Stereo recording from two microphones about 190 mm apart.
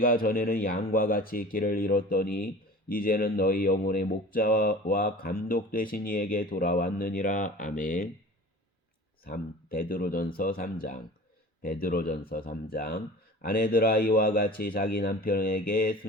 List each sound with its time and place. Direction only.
0.0 s speech: 50° left (ahead or behind)
9.2 s speech: 50° left (ahead or behind)